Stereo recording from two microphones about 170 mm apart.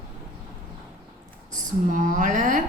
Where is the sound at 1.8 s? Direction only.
50° right (ahead or behind).